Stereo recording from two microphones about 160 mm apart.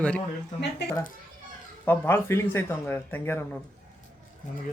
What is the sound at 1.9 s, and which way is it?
Speech, 15° left (ahead or behind).